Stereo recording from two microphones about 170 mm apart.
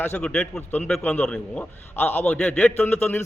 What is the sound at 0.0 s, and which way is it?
A man's voice, 10° left (ahead or behind).